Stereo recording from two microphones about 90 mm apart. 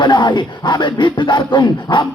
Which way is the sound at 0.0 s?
55° left (ahead or behind).